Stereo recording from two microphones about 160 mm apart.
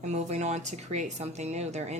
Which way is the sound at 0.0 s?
45° right (ahead or behind).